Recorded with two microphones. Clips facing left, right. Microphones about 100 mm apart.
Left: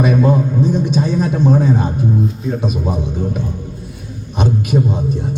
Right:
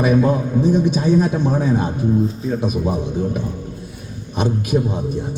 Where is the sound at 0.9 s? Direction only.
15° right (ahead or behind).